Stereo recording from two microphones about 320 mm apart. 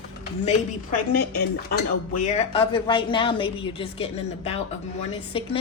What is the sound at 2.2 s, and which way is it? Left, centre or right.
A woman's voice, centre.